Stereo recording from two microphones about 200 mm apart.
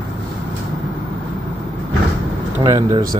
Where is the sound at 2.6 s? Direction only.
20° right (ahead or behind).